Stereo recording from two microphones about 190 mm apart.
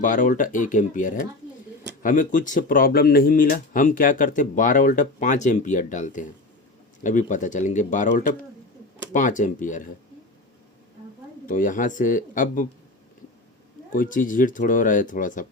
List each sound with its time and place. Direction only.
0.0 s speech: 45° left (ahead or behind)
11.4 s speech: 45° left (ahead or behind)
13.9 s speech: 45° left (ahead or behind)